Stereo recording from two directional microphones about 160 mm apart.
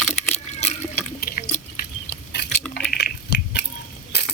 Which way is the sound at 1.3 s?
60° left (ahead or behind).